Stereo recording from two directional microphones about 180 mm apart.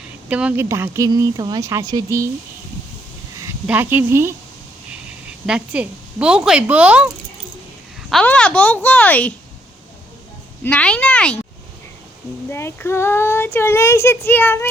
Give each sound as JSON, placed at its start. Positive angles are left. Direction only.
{"t": 0.3, "sound": "speech", "side_deg": -5}
{"t": 3.4, "sound": "speech", "side_deg": -10}
{"t": 5.5, "sound": "speech", "side_deg": -5}
{"t": 8.1, "sound": "speech", "side_deg": 5}
{"t": 10.6, "sound": "speech", "side_deg": 5}
{"t": 12.5, "sound": "speech", "side_deg": 15}